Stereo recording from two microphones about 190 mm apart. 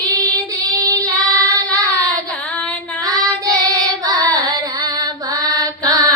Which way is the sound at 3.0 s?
20° right (ahead or behind).